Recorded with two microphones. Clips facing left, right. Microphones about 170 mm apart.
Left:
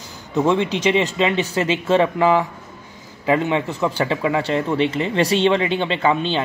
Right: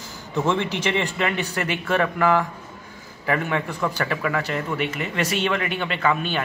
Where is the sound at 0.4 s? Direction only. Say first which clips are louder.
Left 5 dB; 20° left (ahead or behind).